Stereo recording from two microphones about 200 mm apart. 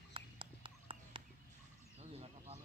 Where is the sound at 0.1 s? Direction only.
25° right (ahead or behind).